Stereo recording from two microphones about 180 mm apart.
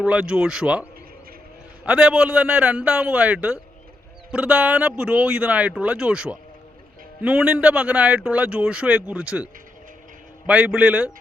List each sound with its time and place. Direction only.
0.0 s a man's voice: 5° right (ahead or behind)